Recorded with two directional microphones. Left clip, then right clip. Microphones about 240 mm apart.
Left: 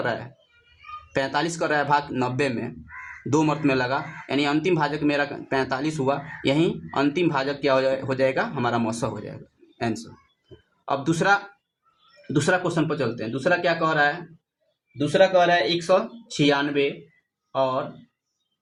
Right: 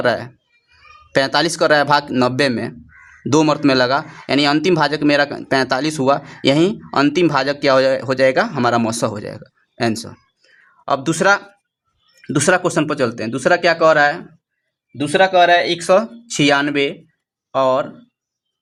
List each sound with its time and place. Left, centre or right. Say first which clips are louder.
0.0 s speech: right 10 dB; right